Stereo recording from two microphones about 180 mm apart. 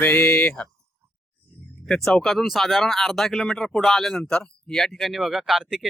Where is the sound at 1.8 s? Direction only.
Centre (ahead or behind).